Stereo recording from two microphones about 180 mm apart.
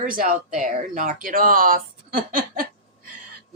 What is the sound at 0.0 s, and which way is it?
Speech, 50° right (ahead or behind).